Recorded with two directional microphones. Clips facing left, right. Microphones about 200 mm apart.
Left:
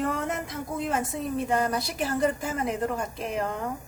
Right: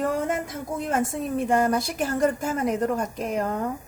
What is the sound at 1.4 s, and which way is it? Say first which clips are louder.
A woman's voice: right 7 dB; 50° right (ahead or behind).